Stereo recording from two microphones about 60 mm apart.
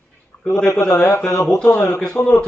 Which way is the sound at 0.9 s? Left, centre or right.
Left.